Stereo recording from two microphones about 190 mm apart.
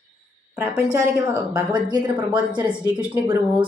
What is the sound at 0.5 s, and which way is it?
Speech, 10° right (ahead or behind).